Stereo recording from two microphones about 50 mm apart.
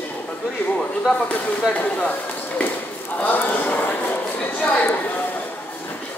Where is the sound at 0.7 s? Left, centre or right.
Left.